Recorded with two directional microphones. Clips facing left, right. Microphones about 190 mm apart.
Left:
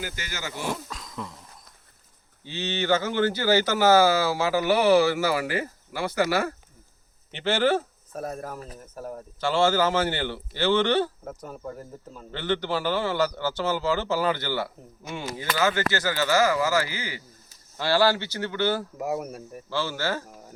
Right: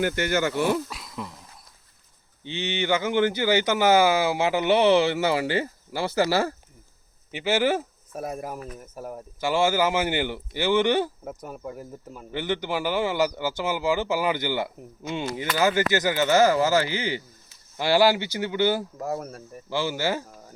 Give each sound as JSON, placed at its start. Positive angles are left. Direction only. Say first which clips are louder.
{"t": 0.0, "sound": "speech", "louder": "right 12 dB", "side_deg": -60}
{"t": 0.9, "sound": "a sound", "louder": "even", "side_deg": -10}
{"t": 2.4, "sound": "speech", "louder": "right 1 dB", "side_deg": -15}
{"t": 7.3, "sound": "speech", "louder": "even", "side_deg": -10}
{"t": 18.9, "sound": "speech", "louder": "left 1 dB", "side_deg": 10}
{"t": 19.7, "sound": "speech", "louder": "right 2 dB", "side_deg": -15}